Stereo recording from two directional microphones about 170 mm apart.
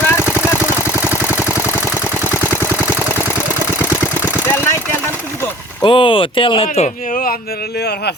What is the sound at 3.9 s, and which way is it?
Engine, 15° left (ahead or behind).